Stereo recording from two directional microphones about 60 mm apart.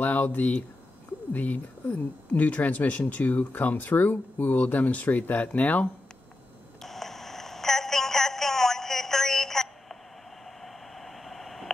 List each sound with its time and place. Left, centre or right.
0.0 s speech: left
6.8 s a sound: centre
10.4 s white noise: centre